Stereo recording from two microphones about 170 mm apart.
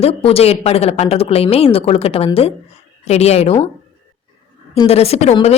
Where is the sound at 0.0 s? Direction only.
35° left (ahead or behind).